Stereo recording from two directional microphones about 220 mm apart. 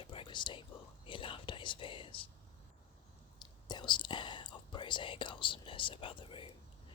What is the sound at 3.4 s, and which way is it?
Whispering, 20° left (ahead or behind).